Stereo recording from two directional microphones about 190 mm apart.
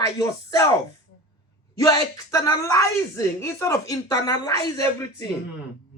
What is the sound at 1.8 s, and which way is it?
Speech, 15° left (ahead or behind).